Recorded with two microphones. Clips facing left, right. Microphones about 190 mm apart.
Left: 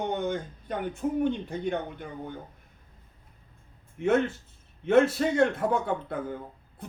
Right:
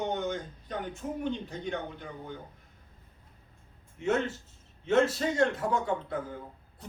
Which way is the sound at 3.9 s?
55° left (ahead or behind).